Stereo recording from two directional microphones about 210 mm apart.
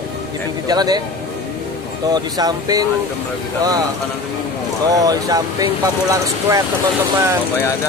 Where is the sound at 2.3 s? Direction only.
20° right (ahead or behind).